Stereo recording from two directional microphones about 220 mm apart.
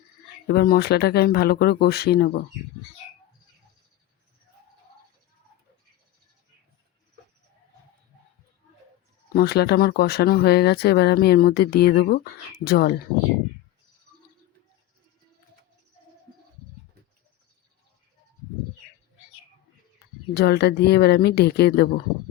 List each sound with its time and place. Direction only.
0.4 s speech: 45° left (ahead or behind)
9.3 s speech: 45° left (ahead or behind)
20.3 s speech: 45° left (ahead or behind)